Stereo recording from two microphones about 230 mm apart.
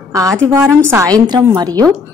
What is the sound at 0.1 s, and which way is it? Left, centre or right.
A woman's voice, centre.